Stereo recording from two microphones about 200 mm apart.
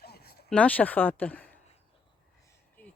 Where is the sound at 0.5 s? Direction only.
5° left (ahead or behind).